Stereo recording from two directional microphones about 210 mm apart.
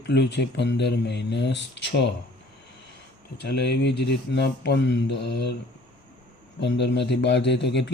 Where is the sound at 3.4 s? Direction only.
50° left (ahead or behind).